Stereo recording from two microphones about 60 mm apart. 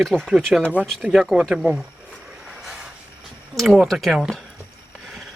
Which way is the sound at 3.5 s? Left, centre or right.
Centre.